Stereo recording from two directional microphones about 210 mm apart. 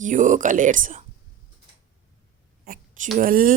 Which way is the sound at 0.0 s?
35° right (ahead or behind).